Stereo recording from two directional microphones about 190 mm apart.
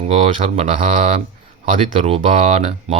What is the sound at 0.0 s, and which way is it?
Speech, 35° right (ahead or behind).